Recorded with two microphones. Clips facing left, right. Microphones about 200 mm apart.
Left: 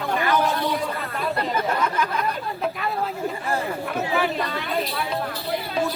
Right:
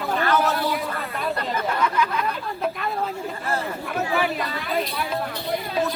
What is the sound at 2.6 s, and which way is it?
Chatter, centre (ahead or behind).